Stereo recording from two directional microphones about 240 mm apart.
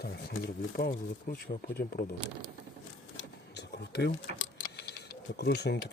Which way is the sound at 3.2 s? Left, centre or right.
Left.